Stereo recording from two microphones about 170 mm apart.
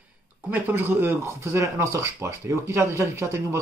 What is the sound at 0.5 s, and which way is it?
Speech, 15° right (ahead or behind).